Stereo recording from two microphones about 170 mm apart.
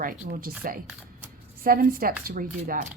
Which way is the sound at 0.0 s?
55° right (ahead or behind).